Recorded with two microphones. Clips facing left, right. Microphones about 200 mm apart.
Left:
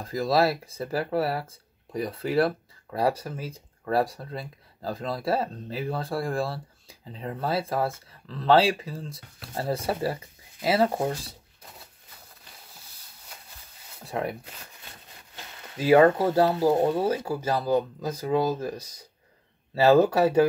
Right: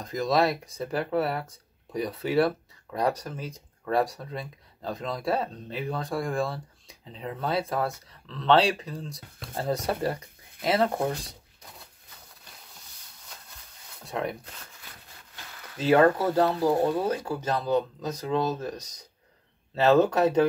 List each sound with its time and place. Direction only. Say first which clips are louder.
0.0 s speech: left 1 dB; 5° left (ahead or behind)
14.0 s speech: left 1 dB; 5° left (ahead or behind)
15.5 s a sound: left 2 dB; 25° left (ahead or behind)
15.8 s speech: left 2 dB; 10° left (ahead or behind)
16.7 s speech: left 1 dB; 20° left (ahead or behind)
17.3 s speech: left 2 dB; 10° left (ahead or behind)